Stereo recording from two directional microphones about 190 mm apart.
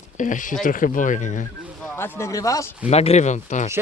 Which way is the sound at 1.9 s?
10° left (ahead or behind).